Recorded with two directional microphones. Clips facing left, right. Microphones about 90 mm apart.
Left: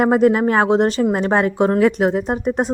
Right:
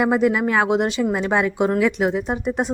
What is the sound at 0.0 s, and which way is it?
A woman's voice, 40° left (ahead or behind).